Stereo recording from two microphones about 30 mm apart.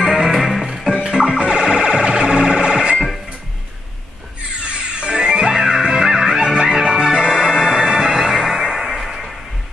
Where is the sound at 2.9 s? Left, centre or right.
Centre.